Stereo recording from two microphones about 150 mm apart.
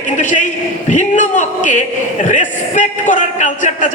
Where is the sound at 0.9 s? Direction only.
55° left (ahead or behind).